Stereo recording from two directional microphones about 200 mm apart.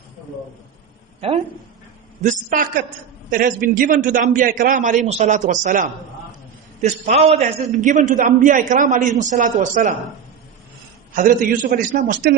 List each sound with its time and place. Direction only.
2.2 s a man's voice: 40° right (ahead or behind)
11.1 s a man's voice: 40° right (ahead or behind)